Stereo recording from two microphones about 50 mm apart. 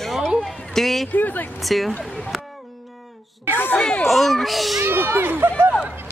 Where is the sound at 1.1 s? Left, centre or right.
Left.